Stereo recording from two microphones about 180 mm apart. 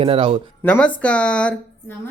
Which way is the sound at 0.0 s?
30° right (ahead or behind).